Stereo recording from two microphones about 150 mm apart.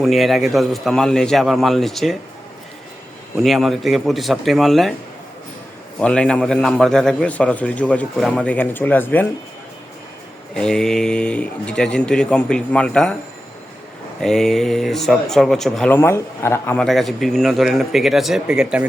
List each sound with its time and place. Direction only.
0.0 s speech: centre (ahead or behind)
3.4 s speech: centre (ahead or behind)
6.0 s a man's voice: 5° left (ahead or behind)
10.5 s speech: 5° left (ahead or behind)
14.2 s speech: centre (ahead or behind)
15.9 s a man's voice: 15° left (ahead or behind)
16.7 s speech: centre (ahead or behind)